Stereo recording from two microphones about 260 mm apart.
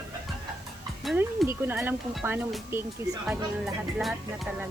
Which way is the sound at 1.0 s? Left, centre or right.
Centre.